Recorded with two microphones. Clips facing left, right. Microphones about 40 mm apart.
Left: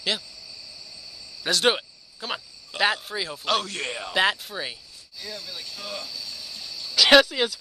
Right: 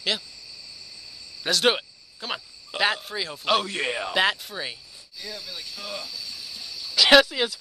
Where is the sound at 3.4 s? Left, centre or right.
Centre.